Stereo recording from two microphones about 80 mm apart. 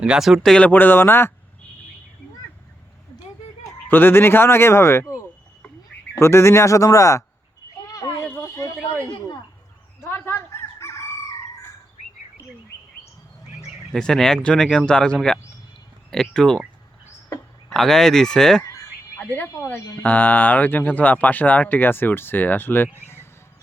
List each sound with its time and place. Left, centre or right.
0.0 s speech: centre
0.4 s speech: centre
0.7 s speech: left
3.8 s speech: left
7.9 s a sound: left
8.2 s a sound: centre
10.0 s chicken: left
13.9 s speech: centre
17.2 s a sound: left
17.7 s speech: centre
19.6 s speech: left
20.0 s speech: centre